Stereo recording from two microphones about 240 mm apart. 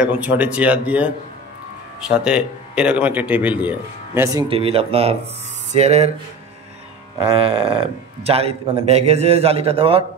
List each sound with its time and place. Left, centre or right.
0.0 s speech: centre; by 6.1 s right
7.2 s speech: right